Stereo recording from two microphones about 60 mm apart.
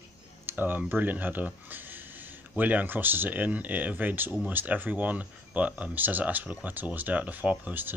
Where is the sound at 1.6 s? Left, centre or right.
Right.